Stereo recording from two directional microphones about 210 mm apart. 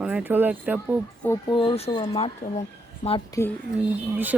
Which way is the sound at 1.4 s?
25° left (ahead or behind).